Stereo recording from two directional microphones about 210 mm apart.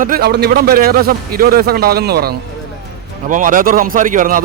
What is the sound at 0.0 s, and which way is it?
A man's voice, 45° right (ahead or behind).